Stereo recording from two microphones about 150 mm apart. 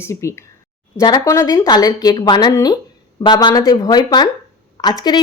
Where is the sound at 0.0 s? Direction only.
20° left (ahead or behind).